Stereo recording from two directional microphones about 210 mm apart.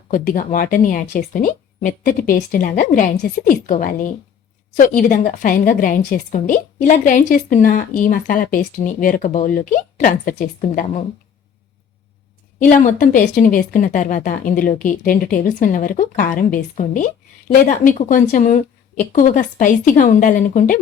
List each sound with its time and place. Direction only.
0.1 s a woman's voice: 40° left (ahead or behind)
12.5 s a woman's voice: 40° left (ahead or behind)